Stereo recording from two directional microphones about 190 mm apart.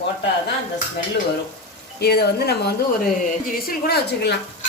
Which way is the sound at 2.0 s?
55° left (ahead or behind).